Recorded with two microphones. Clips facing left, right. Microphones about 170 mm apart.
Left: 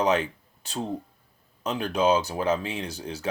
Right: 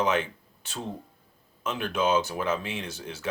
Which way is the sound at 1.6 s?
35° left (ahead or behind).